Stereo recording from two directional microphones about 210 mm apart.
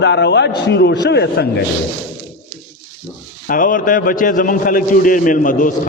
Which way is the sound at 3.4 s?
40° left (ahead or behind).